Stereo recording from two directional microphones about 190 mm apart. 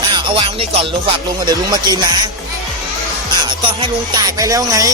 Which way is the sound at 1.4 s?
20° right (ahead or behind).